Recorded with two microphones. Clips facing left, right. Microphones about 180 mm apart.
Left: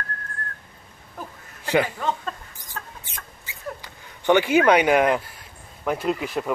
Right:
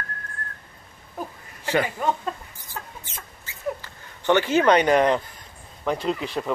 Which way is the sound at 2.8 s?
10° right (ahead or behind).